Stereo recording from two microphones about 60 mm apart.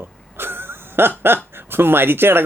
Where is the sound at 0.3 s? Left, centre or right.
Right.